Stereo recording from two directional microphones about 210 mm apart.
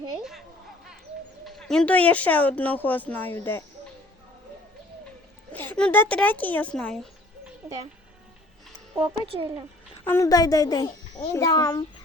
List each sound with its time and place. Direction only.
1.5 s speech: centre (ahead or behind)
5.5 s speech: 10° left (ahead or behind)
9.0 s speech: 25° right (ahead or behind)
10.0 s speech: 10° left (ahead or behind)